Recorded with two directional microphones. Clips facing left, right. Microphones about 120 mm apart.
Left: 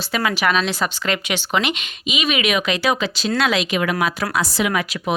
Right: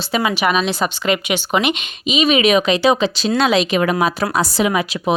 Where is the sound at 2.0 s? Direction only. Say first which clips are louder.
Right 7 dB; 30° right (ahead or behind).